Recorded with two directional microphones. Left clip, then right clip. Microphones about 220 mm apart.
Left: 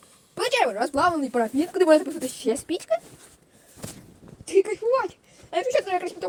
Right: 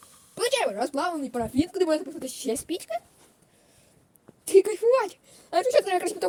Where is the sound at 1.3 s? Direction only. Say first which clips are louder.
Left 4 dB; 20° left (ahead or behind).